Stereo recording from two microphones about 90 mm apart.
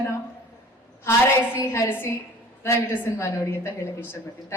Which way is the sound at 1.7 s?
30° left (ahead or behind).